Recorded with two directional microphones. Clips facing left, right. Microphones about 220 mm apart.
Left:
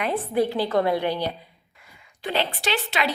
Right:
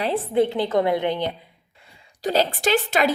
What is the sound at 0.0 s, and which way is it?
A woman's voice, 25° right (ahead or behind).